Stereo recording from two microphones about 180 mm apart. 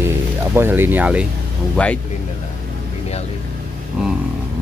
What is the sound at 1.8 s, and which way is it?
Speech, 5° left (ahead or behind).